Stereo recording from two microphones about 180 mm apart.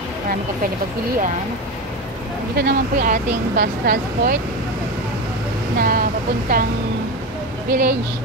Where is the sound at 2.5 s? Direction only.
60° right (ahead or behind).